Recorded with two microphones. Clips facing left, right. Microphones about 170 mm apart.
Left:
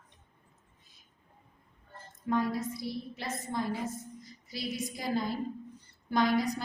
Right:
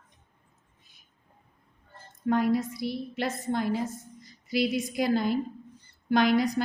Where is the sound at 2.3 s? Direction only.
70° right (ahead or behind).